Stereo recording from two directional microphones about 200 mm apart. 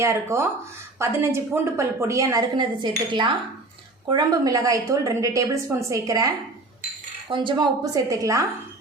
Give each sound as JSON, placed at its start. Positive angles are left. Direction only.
{"t": 0.0, "sound": "a woman's voice", "side_deg": -15}